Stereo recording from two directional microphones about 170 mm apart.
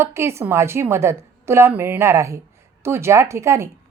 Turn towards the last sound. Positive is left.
turn(degrees=-15)  # may be behind; listen again after turning